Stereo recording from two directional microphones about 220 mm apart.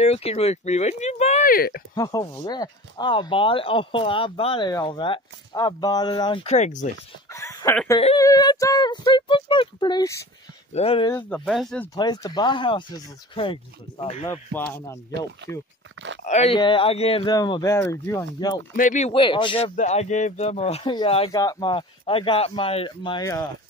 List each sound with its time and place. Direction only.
0.0 s speech: 30° left (ahead or behind)
2.0 s speech: 15° left (ahead or behind); by 6.9 s 35° left (ahead or behind)
7.2 s speech: 15° left (ahead or behind)
10.7 s speech: 25° left (ahead or behind)
11.1 s speech: 10° left (ahead or behind)
11.9 s speech: 15° left (ahead or behind)
14.5 s speech: 10° left (ahead or behind)
15.0 s speech: 50° right (ahead or behind)
16.3 s speech: 25° left (ahead or behind)
18.8 s speech: 35° left (ahead or behind); by 23.5 s 20° left (ahead or behind)